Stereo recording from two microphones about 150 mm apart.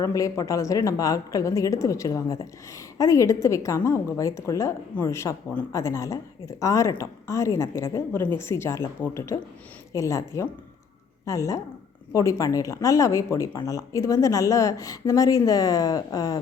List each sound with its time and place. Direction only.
0.0 s a woman's voice: 20° left (ahead or behind)